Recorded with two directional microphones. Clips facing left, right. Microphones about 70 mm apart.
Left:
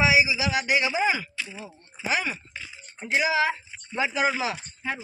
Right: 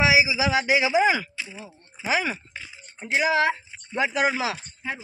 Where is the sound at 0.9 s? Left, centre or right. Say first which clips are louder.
Right 5 dB; right.